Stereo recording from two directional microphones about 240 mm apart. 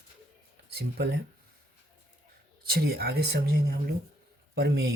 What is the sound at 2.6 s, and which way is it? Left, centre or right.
Speech, right.